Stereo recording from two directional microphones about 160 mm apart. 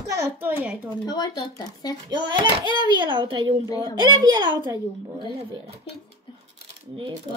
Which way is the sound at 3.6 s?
25° left (ahead or behind).